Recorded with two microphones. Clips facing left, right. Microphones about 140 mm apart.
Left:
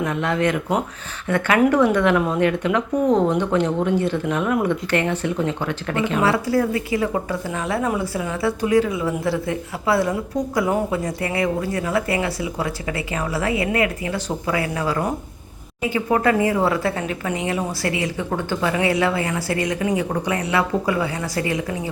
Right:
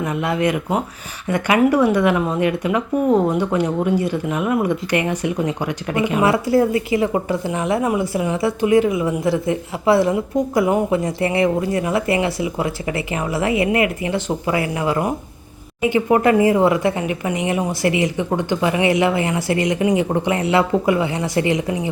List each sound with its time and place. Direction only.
0.0 s speech: 10° right (ahead or behind)
6.3 s a woman's voice: 25° right (ahead or behind)